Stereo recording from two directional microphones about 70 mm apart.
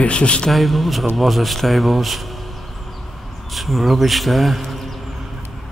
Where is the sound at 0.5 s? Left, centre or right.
Centre.